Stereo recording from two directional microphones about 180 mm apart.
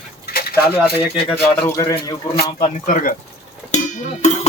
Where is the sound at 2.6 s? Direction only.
50° left (ahead or behind).